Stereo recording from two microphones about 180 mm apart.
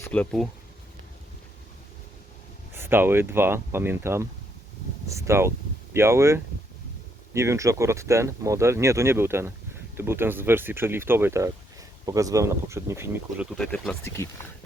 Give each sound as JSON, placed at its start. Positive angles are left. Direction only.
{"t": 0.0, "sound": "speech", "side_deg": 5}
{"t": 2.7, "sound": "speech", "side_deg": -10}
{"t": 13.6, "sound": "speech", "side_deg": 5}